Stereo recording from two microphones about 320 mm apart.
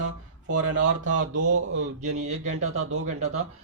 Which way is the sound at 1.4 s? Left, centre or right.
Right.